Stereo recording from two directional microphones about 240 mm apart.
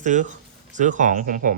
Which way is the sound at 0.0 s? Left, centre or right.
Right.